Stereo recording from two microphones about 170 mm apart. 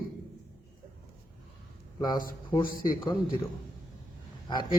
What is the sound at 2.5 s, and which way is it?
Speech, 25° left (ahead or behind).